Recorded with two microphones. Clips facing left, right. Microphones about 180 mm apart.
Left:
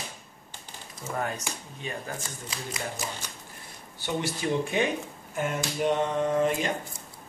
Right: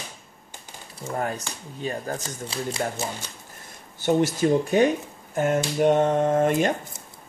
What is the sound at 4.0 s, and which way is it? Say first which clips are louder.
Speech: right 9 dB; 45° right (ahead or behind).